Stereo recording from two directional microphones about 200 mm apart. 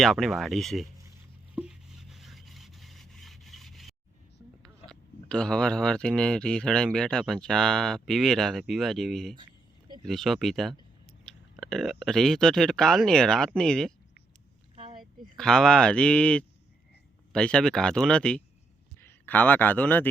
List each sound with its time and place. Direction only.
0.0 s speech: centre (ahead or behind)
1.5 s rub: 5° right (ahead or behind)
4.9 s speech: 5° left (ahead or behind)
14.8 s a sound: 30° right (ahead or behind)
15.4 s a man's voice: 5° left (ahead or behind)